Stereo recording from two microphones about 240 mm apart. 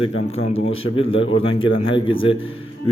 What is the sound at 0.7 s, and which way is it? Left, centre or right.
Speech, left.